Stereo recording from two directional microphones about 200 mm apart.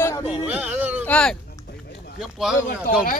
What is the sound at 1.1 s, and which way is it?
Speech, 5° left (ahead or behind).